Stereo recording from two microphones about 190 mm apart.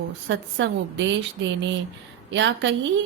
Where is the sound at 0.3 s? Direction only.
75° right (ahead or behind).